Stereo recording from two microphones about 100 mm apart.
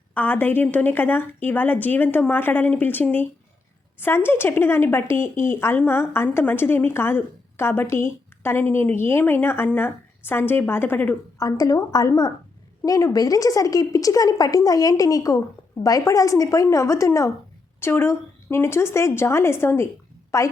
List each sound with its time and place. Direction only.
0.1 s a woman's voice: 15° left (ahead or behind)
11.3 s a woman's voice: 35° left (ahead or behind)